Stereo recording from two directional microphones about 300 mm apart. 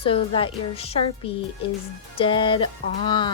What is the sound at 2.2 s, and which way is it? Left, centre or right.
Speech, centre.